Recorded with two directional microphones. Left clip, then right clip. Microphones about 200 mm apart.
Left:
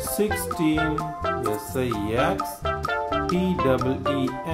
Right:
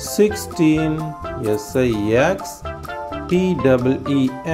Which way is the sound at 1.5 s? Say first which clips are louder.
Right 8 dB; 25° right (ahead or behind).